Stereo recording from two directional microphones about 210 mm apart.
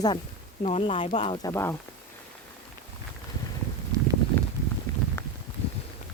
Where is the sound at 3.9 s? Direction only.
15° right (ahead or behind).